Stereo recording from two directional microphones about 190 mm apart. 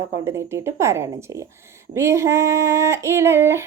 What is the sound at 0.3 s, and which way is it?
A woman's voice, 15° right (ahead or behind).